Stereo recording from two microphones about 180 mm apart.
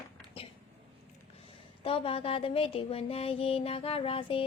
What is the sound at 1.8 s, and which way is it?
A woman's voice, 30° left (ahead or behind).